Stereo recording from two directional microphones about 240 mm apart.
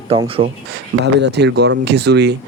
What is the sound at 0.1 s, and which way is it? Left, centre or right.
Speech, right.